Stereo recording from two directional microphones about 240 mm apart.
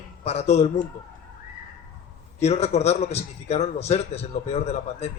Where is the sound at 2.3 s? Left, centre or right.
Left.